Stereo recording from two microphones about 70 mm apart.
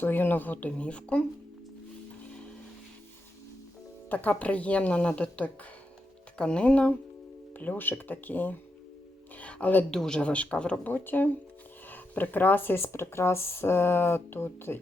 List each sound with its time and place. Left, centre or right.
0.0 s a woman's voice: left
4.1 s a woman's voice: left
9.3 s a sound: centre
9.9 s speech: centre; by 14.8 s left